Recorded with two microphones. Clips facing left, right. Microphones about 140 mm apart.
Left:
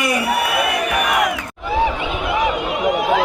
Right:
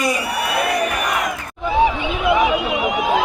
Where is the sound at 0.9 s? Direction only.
65° left (ahead or behind).